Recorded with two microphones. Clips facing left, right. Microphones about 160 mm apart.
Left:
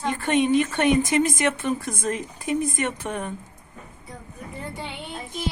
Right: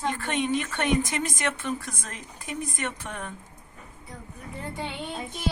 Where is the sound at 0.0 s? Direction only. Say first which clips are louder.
Left 6 dB; 15° left (ahead or behind).